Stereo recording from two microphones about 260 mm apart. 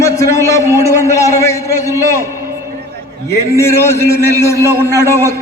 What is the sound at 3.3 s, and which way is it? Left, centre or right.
A man's voice, centre.